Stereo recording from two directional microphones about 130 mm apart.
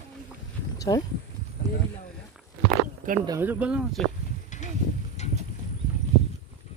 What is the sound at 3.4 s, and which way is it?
Speech, 15° right (ahead or behind).